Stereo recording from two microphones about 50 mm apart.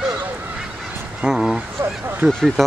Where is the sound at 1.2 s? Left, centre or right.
Centre.